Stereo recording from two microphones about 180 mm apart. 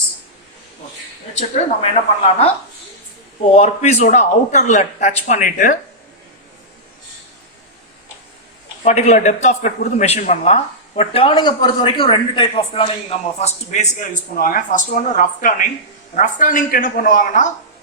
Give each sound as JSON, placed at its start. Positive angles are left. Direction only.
{"t": 1.4, "sound": "speech", "side_deg": 35}
{"t": 3.5, "sound": "speech", "side_deg": 35}
{"t": 8.8, "sound": "speech", "side_deg": 40}